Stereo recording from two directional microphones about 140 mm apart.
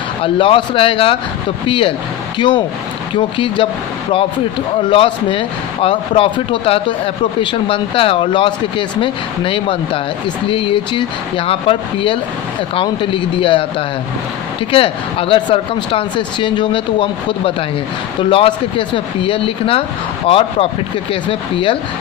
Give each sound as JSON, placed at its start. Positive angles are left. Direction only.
{"t": 0.2, "sound": "speech", "side_deg": 40}
{"t": 4.9, "sound": "speech", "side_deg": 40}